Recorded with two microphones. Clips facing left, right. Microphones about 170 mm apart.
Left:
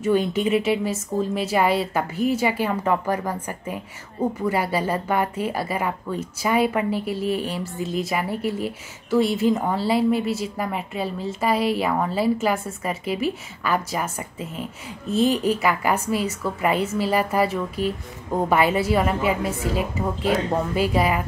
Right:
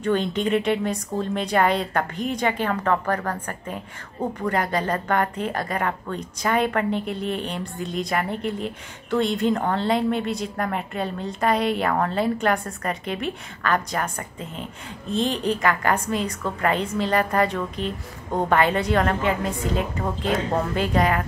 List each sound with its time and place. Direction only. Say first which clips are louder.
0.0 s a woman's voice: left 2 dB; 5° left (ahead or behind)